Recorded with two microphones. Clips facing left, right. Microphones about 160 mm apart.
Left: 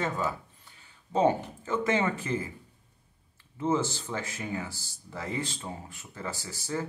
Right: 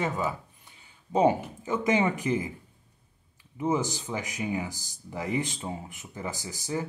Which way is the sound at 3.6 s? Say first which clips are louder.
Even; 15° right (ahead or behind).